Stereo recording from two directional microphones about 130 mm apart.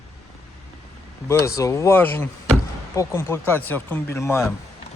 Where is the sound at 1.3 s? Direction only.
20° left (ahead or behind).